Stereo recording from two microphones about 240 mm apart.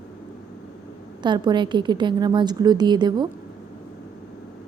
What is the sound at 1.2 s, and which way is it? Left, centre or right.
A woman's voice, centre.